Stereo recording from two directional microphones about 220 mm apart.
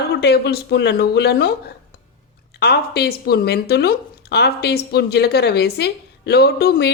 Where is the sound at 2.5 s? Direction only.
45° left (ahead or behind).